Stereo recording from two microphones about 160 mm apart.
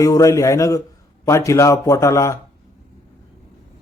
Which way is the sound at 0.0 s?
20° left (ahead or behind).